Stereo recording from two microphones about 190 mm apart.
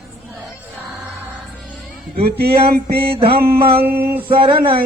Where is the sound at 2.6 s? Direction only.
55° right (ahead or behind).